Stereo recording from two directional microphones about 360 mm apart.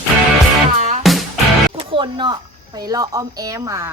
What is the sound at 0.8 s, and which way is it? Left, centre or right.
Music, centre.